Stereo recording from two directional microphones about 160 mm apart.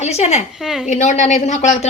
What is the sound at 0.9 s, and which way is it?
Speech, 50° left (ahead or behind).